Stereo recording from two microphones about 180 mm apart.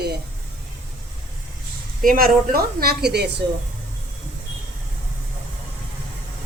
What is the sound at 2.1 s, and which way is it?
A woman's voice, 55° right (ahead or behind).